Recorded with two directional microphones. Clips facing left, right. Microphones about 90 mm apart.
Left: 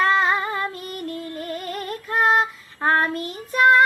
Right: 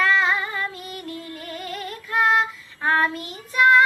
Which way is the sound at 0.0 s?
40° left (ahead or behind).